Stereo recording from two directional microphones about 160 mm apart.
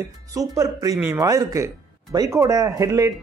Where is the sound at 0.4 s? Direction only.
20° right (ahead or behind).